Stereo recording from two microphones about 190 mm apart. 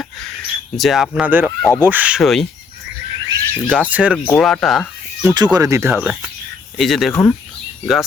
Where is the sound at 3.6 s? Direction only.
5° left (ahead or behind).